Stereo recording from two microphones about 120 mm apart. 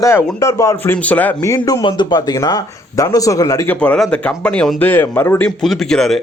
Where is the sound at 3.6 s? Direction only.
15° left (ahead or behind).